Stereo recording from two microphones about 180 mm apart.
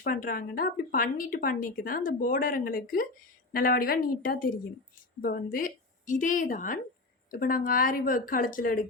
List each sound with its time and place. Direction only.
0.0 s a woman's voice: 50° left (ahead or behind)